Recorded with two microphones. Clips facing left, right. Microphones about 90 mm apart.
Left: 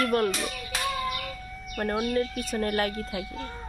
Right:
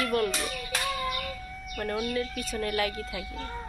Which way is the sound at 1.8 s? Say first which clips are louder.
Left 4 dB; 40° left (ahead or behind).